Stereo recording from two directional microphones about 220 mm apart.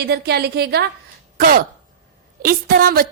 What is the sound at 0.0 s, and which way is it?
Speech, 45° right (ahead or behind).